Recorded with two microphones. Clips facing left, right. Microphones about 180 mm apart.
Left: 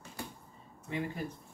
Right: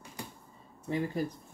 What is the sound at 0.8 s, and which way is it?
Speech, 35° right (ahead or behind).